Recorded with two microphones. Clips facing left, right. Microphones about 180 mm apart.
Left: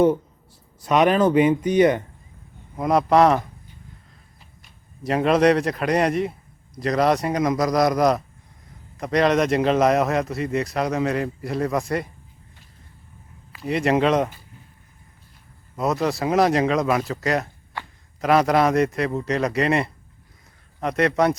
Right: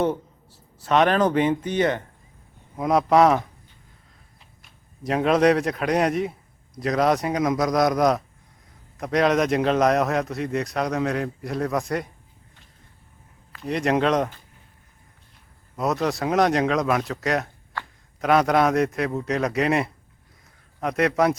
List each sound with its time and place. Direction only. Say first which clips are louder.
0.8 s speech: left 2 dB; 10° left (ahead or behind)
2.7 s a man's voice: left 1 dB; centre (ahead or behind)
4.6 s a man's voice: left 1 dB; centre (ahead or behind)
13.5 s speech: left 2 dB; 5° left (ahead or behind)
15.7 s a man's voice: left 1 dB; centre (ahead or behind)